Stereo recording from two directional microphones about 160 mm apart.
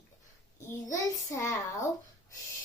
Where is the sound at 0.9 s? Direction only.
20° left (ahead or behind).